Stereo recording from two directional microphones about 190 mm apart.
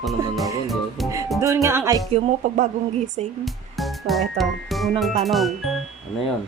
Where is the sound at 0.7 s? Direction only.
Centre (ahead or behind).